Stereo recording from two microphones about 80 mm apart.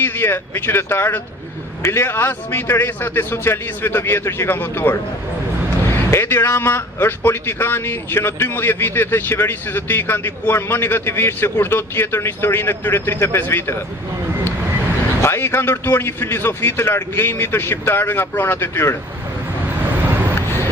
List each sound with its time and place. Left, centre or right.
0.0 s a man's voice: left
6.1 s a man's voice: left
15.2 s a man's voice: left